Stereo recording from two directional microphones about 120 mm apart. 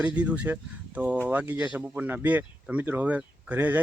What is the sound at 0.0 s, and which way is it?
Speech, 10° right (ahead or behind).